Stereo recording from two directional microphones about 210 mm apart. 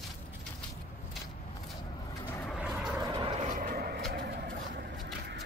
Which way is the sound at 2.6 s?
5° right (ahead or behind).